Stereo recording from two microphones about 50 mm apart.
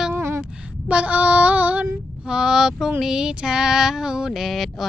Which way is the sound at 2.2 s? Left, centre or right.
Centre.